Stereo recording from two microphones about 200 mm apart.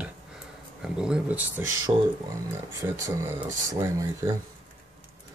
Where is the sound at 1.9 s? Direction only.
20° right (ahead or behind).